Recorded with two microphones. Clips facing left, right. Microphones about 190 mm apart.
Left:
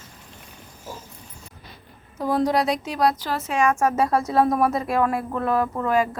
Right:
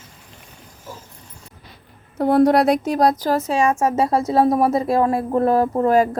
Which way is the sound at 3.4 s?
30° right (ahead or behind).